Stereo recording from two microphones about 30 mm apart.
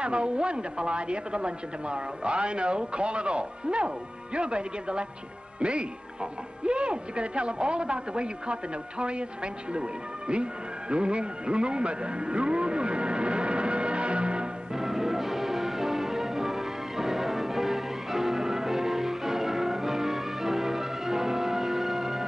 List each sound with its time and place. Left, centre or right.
0.0 s speech: right
14.7 s music: centre